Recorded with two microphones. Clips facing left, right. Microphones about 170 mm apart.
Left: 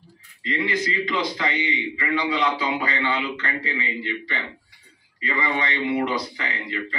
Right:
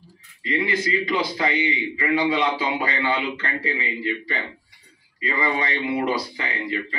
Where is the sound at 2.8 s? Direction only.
30° right (ahead or behind).